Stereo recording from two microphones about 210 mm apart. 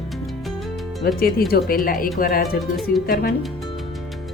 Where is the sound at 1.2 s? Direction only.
45° left (ahead or behind).